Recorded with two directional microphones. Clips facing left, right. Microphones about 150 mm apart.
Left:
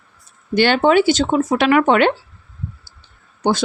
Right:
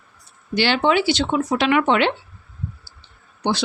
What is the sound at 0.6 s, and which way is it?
A woman's voice, 50° left (ahead or behind).